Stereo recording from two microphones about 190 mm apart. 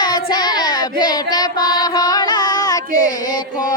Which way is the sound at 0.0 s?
20° left (ahead or behind).